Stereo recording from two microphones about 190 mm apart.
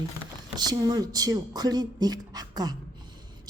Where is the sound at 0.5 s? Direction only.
20° right (ahead or behind).